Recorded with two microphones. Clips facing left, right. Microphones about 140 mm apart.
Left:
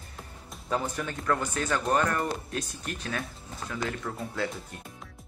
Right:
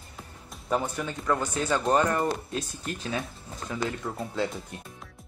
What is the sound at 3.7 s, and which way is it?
Speech, 15° right (ahead or behind).